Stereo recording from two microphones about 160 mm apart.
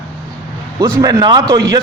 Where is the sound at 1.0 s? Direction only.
25° right (ahead or behind).